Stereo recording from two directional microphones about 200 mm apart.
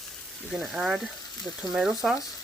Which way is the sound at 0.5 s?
Centre (ahead or behind).